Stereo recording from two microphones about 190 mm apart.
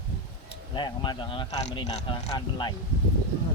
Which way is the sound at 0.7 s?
25° left (ahead or behind).